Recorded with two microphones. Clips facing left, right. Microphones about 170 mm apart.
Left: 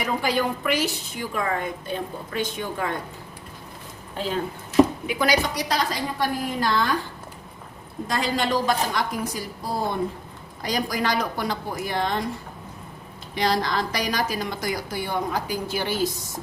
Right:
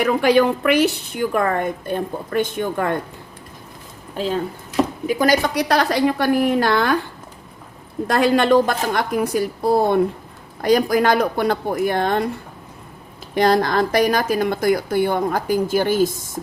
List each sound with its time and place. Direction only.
0.0 s speech: 65° right (ahead or behind)
5.0 s a woman's voice: 45° right (ahead or behind); by 7.0 s 65° right (ahead or behind)
8.0 s speech: 60° right (ahead or behind)
13.3 s speech: 50° right (ahead or behind)